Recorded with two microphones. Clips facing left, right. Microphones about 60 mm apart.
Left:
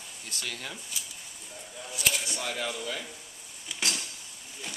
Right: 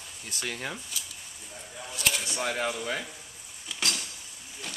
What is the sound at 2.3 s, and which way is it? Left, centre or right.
Speech, right.